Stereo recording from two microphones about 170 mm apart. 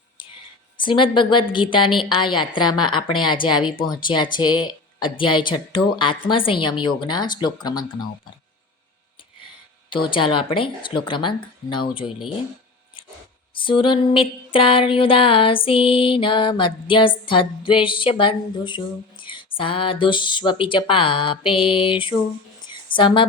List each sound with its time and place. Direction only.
0.8 s a woman's voice: 30° left (ahead or behind)
9.9 s a woman's voice: 30° left (ahead or behind)
13.5 s music: 30° left (ahead or behind)
22.6 s a sound: 25° left (ahead or behind)